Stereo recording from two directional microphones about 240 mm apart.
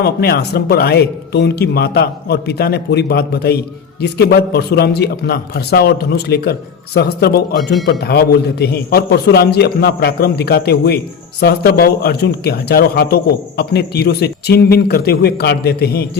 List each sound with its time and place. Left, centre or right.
0.0 s a man's voice: left